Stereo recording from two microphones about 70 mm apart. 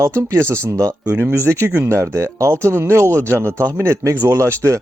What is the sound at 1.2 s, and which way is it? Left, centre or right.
Speech, right.